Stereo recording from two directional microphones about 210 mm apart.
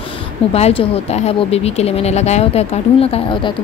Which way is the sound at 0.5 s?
30° left (ahead or behind).